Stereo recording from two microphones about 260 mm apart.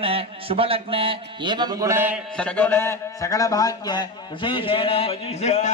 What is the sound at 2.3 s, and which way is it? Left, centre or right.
A man's voice, centre.